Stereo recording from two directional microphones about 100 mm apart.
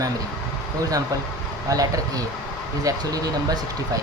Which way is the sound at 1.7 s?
35° right (ahead or behind).